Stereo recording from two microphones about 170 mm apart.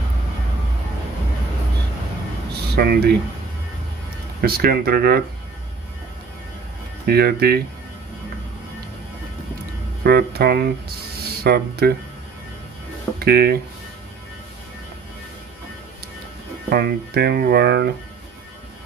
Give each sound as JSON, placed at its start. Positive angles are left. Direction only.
{"t": 2.7, "sound": "speech", "side_deg": -70}
{"t": 4.4, "sound": "speech", "side_deg": -65}
{"t": 7.1, "sound": "speech", "side_deg": -65}
{"t": 10.0, "sound": "speech", "side_deg": -70}
{"t": 13.2, "sound": "speech", "side_deg": -65}
{"t": 16.7, "sound": "speech", "side_deg": -70}